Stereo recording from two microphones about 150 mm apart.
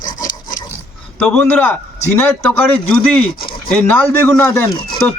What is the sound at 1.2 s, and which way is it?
A man's voice, 5° left (ahead or behind).